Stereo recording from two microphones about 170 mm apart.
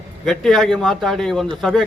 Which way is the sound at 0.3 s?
Centre (ahead or behind).